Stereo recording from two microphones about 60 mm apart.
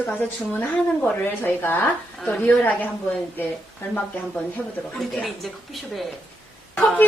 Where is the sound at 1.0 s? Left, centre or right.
Left.